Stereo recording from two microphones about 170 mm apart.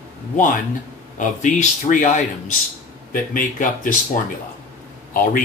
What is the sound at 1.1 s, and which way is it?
Speech, 45° left (ahead or behind).